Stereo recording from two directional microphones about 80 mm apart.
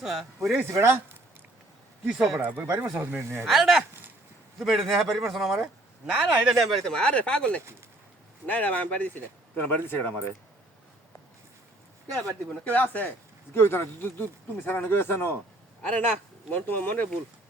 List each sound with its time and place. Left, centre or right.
0.0 s speech: centre
0.5 s speech: right
2.0 s speech: centre
2.4 s speech: right
3.4 s speech: centre
6.9 s speech: centre; by 10.3 s left
12.5 s speech: left
15.8 s speech: centre